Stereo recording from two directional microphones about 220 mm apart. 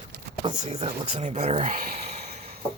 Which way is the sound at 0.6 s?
30° right (ahead or behind).